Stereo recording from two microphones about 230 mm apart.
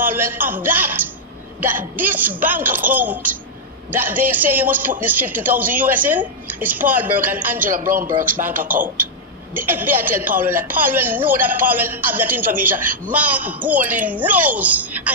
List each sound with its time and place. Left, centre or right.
0.0 s a woman's voice: centre
7.7 s speech: right
8.0 s a woman's voice: centre
9.6 s a woman's voice: centre